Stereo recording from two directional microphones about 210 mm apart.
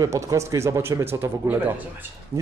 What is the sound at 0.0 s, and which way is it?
Speech, 15° right (ahead or behind).